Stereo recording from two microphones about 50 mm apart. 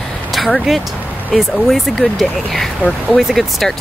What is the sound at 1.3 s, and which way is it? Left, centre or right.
Female singing, centre.